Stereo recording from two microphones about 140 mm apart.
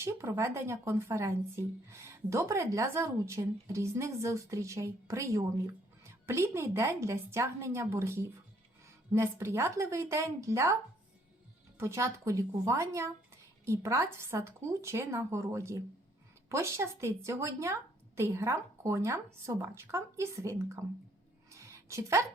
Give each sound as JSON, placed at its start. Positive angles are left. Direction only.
{"t": 0.0, "sound": "speech", "side_deg": -20}
{"t": 11.8, "sound": "speech", "side_deg": -20}
{"t": 21.5, "sound": "a sound", "side_deg": -20}